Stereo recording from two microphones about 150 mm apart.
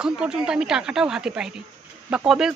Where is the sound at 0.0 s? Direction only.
5° right (ahead or behind).